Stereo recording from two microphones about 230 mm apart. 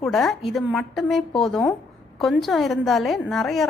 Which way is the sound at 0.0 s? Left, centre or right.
Centre.